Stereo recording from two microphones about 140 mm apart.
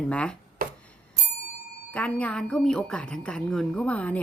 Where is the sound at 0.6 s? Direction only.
90° right.